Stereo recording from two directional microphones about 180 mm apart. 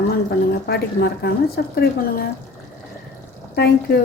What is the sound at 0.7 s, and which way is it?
A woman's voice, 60° left (ahead or behind).